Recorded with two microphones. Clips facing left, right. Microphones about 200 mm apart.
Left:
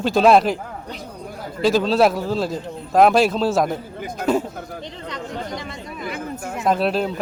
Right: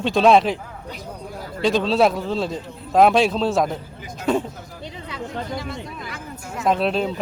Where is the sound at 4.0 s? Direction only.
60° left (ahead or behind).